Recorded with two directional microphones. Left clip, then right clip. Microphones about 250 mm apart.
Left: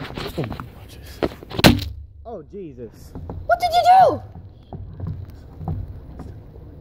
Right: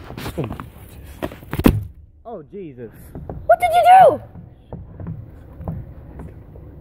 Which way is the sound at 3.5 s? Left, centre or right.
Centre.